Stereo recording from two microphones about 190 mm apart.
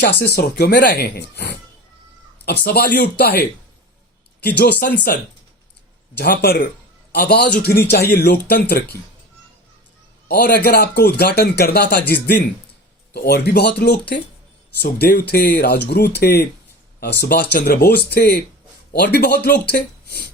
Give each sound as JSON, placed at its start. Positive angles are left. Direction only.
{"t": 0.0, "sound": "speech", "side_deg": 60}
{"t": 4.4, "sound": "speech", "side_deg": 55}
{"t": 6.1, "sound": "speech", "side_deg": 55}
{"t": 10.2, "sound": "speech", "side_deg": 55}
{"t": 13.1, "sound": "speech", "side_deg": 60}